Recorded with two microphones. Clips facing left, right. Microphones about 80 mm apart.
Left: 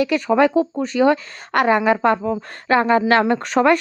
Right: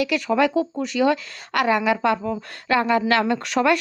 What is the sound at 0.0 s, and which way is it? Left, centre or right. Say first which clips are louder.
Speech: left 4 dB; left.